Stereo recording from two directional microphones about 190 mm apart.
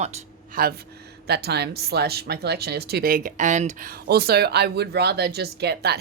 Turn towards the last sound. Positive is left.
turn(degrees=-60)  # may be behind; listen again after turning